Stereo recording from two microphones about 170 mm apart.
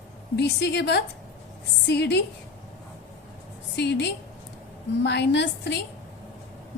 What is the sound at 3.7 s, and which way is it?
A woman's voice, 85° left.